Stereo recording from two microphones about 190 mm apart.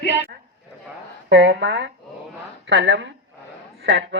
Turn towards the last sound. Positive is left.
turn(degrees=-65)  # may be behind; listen again after turning